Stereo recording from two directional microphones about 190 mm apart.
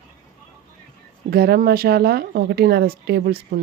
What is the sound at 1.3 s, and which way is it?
Speech, 55° right (ahead or behind).